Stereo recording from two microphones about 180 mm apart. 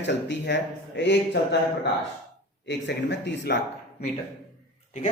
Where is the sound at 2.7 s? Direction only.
75° left (ahead or behind).